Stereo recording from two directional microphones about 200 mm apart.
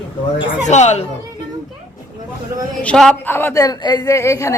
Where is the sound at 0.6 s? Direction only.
35° left (ahead or behind).